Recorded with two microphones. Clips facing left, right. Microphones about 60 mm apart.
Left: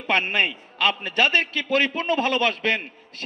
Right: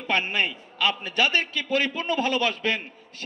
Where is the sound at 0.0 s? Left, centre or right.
Left.